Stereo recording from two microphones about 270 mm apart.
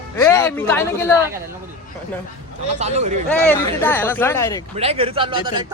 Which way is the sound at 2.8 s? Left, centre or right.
Right.